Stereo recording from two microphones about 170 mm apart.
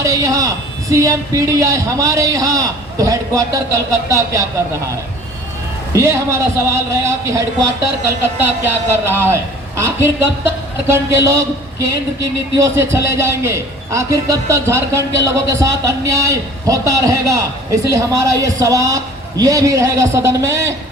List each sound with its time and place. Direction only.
0.0 s a man's voice: 20° right (ahead or behind)
5.9 s a man's voice: 15° right (ahead or behind)
12.6 s a man's voice: 15° right (ahead or behind)